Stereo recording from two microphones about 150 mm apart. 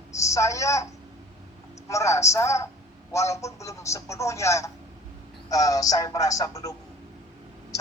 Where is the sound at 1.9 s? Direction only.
20° left (ahead or behind).